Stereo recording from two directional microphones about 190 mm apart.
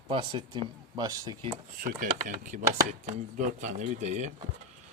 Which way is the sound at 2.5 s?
45° right (ahead or behind).